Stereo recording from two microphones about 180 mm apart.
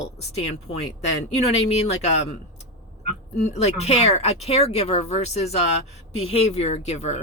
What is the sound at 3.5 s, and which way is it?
Speech, 35° left (ahead or behind).